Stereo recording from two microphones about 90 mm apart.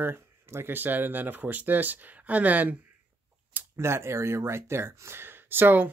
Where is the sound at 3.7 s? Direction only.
30° right (ahead or behind).